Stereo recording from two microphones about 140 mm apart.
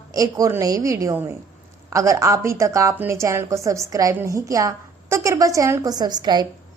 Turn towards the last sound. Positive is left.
turn(degrees=-30)  # may be behind; listen again after turning